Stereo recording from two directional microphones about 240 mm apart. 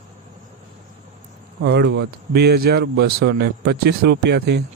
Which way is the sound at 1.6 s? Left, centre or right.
Right.